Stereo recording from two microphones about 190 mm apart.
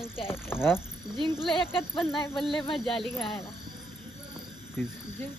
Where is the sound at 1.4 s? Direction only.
Centre (ahead or behind).